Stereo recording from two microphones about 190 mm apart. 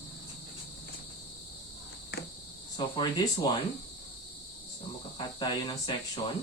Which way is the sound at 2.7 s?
25° left (ahead or behind).